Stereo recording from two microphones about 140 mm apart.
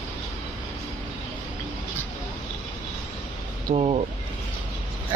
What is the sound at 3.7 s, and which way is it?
Vehicle, 45° right (ahead or behind).